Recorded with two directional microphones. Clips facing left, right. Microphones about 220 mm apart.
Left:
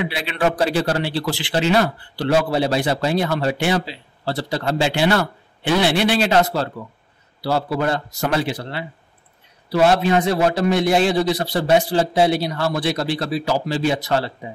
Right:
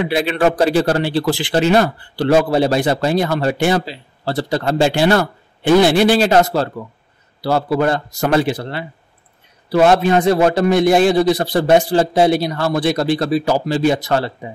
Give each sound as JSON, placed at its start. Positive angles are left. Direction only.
{"t": 0.0, "sound": "a man's voice", "side_deg": -45}